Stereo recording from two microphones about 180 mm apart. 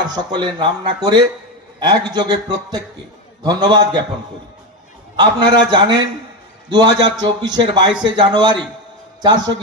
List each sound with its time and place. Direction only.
0.0 s speech: 25° right (ahead or behind)
5.2 s speech: 25° right (ahead or behind)